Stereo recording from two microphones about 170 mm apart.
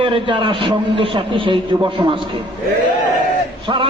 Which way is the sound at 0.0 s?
30° right (ahead or behind).